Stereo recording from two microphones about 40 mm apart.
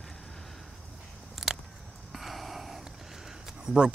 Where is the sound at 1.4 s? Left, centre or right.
Centre.